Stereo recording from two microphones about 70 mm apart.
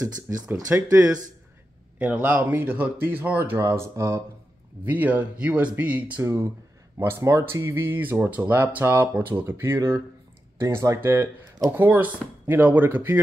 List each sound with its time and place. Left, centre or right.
0.0 s speech: right
0.5 s speech: right
2.0 s speech: centre
3.5 s speech: right
4.8 s speech: right
6.2 s speech: right
10.6 s speech: right
11.0 s speech: right